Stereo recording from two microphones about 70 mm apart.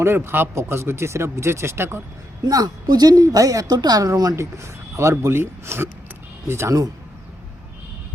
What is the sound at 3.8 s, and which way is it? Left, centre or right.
Speech, right.